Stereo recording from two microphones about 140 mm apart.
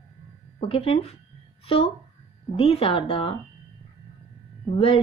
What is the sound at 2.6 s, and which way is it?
Speech, 45° left (ahead or behind).